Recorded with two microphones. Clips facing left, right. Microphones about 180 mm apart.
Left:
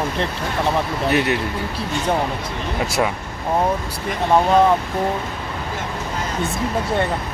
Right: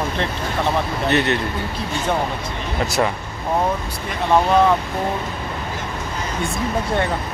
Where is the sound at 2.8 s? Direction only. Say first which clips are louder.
Right 1 dB; 5° left (ahead or behind).